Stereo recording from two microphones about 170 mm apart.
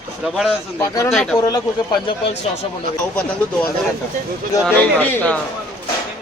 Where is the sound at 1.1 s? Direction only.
Centre (ahead or behind).